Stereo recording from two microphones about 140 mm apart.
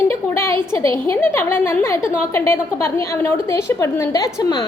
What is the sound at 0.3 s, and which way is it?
A woman's voice, 20° left (ahead or behind).